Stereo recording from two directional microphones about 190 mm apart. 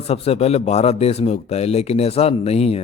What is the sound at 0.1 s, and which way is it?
Speech, 30° left (ahead or behind).